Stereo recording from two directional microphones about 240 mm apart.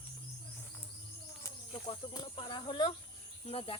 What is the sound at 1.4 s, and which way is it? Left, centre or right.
Speech, centre.